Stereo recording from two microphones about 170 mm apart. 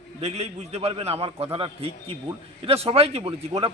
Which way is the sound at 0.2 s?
40° right (ahead or behind).